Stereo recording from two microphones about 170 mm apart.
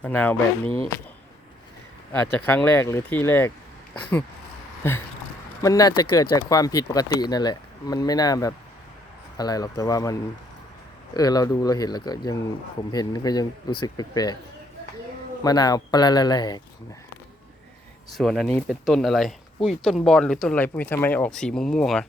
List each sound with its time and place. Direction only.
0.0 s speech: 10° left (ahead or behind)
2.1 s speech: 10° left (ahead or behind)
4.8 s a sound: 15° left (ahead or behind)
5.6 s speech: 20° left (ahead or behind)
15.4 s speech: 20° left (ahead or behind)
18.2 s speech: centre (ahead or behind)